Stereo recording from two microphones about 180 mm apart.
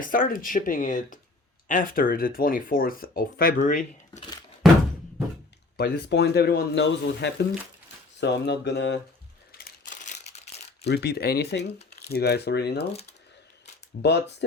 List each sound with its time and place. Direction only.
0.0 s speech: 50° left (ahead or behind)
5.7 s speech: 60° left (ahead or behind)
9.5 s crumpling: 55° left (ahead or behind); by 10.8 s 35° left (ahead or behind)
10.8 s speech: 65° left (ahead or behind)
14.0 s speech: 70° left (ahead or behind)